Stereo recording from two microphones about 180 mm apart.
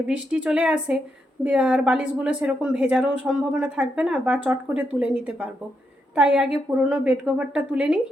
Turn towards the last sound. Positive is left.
turn(degrees=-5)  # may be behind; listen again after turning